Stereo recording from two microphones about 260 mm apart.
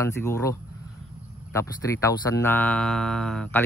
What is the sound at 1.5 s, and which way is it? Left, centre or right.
Speech, centre.